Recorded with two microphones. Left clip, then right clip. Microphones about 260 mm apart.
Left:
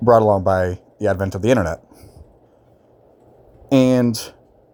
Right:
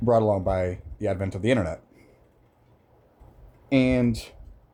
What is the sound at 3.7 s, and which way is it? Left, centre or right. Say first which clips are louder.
Speech: left 7 dB; left.